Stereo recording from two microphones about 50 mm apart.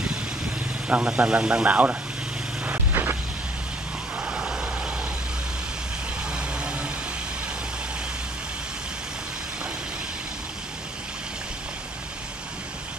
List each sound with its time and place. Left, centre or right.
0.8 s speech: right
2.6 s vehicle: right
4.2 s vehicle: right
6.3 s vehicle: centre